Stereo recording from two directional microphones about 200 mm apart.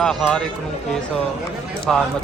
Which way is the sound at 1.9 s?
Centre (ahead or behind).